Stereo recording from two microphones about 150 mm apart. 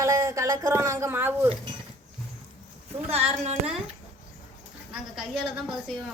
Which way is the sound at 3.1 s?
40° right (ahead or behind).